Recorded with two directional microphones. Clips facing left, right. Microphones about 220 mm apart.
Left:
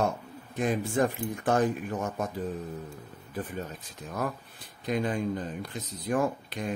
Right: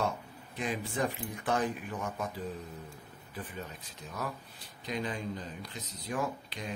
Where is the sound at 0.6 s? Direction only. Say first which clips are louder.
Left 7 dB; 45° left (ahead or behind).